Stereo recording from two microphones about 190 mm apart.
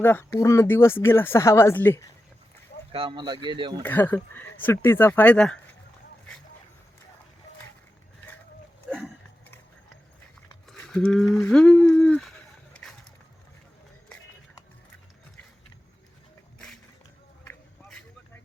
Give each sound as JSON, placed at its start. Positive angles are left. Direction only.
{"t": 0.0, "sound": "speech", "side_deg": 10}
{"t": 2.9, "sound": "speech", "side_deg": -25}
{"t": 3.8, "sound": "speech", "side_deg": 10}
{"t": 8.9, "sound": "a sound", "side_deg": 0}
{"t": 10.7, "sound": "speech", "side_deg": 5}
{"t": 17.5, "sound": "a sound", "side_deg": 5}